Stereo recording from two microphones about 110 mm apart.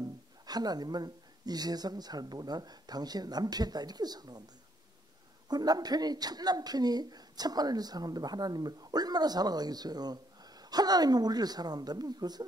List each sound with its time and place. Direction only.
0.0 s a woman's voice: 35° right (ahead or behind)
5.5 s a woman's voice: 35° right (ahead or behind)